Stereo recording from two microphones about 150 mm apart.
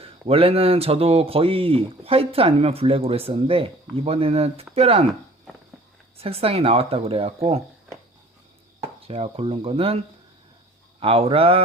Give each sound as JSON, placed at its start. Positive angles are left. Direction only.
{"t": 0.0, "sound": "speech", "side_deg": -40}
{"t": 6.1, "sound": "speech", "side_deg": -40}
{"t": 9.0, "sound": "speech", "side_deg": -40}
{"t": 11.0, "sound": "speech", "side_deg": -40}